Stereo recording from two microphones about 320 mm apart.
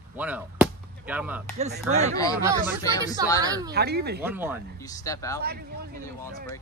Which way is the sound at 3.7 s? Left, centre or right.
Right.